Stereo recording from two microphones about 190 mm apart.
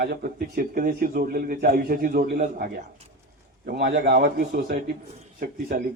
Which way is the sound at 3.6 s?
60° right (ahead or behind).